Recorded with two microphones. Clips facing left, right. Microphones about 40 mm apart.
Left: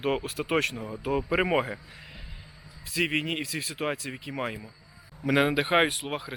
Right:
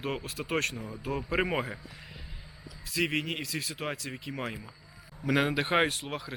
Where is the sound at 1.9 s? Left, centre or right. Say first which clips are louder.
Left 1 dB; centre.